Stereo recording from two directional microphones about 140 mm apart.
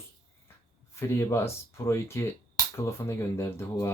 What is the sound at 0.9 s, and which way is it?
Speech, 20° left (ahead or behind).